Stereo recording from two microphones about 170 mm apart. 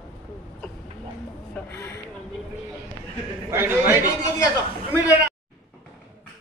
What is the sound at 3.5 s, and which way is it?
Chatter, 15° right (ahead or behind).